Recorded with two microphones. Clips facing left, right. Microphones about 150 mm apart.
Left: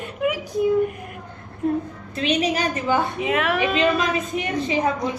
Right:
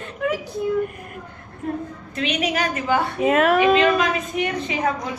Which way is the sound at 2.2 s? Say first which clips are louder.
Left 2 dB; 35° left (ahead or behind).